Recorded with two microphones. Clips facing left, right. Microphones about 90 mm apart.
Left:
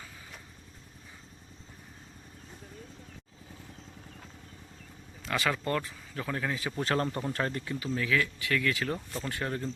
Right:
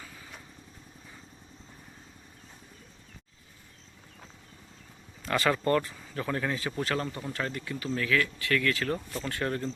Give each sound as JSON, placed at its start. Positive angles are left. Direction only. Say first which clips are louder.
{"t": 5.2, "sound": "speech", "louder": "right 4 dB", "side_deg": 0}
{"t": 6.7, "sound": "speech", "louder": "left 2 dB", "side_deg": 30}
{"t": 7.9, "sound": "speech", "louder": "right 2 dB", "side_deg": 15}